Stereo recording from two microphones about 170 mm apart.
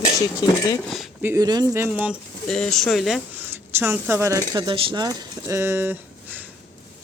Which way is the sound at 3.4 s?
15° right (ahead or behind).